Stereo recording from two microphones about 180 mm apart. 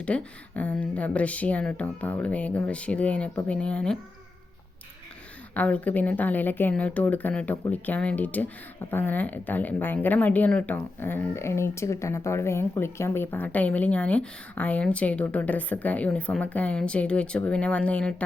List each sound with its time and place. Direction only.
0.0 s speech: 5° left (ahead or behind)
5.5 s speech: 10° left (ahead or behind)